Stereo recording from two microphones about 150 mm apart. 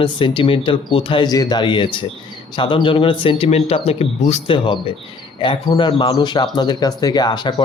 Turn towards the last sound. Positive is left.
turn(degrees=30)  # may be behind; listen again after turning